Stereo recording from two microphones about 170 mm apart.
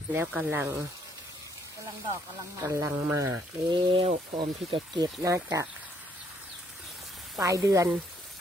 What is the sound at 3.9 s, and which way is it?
Speech, 35° right (ahead or behind).